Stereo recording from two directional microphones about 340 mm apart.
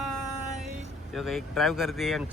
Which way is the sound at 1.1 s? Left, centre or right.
Centre.